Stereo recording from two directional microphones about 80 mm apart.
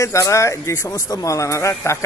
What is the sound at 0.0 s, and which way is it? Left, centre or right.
A man's voice, left.